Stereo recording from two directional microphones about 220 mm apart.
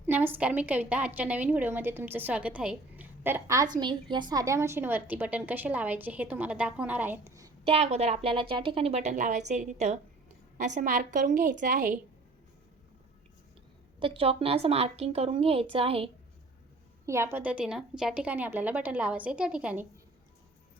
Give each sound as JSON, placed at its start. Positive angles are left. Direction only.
{"t": 0.0, "sound": "a woman's voice", "side_deg": -10}
{"t": 7.6, "sound": "a woman's voice", "side_deg": -25}
{"t": 14.0, "sound": "a woman's voice", "side_deg": -25}
{"t": 17.1, "sound": "a woman's voice", "side_deg": -10}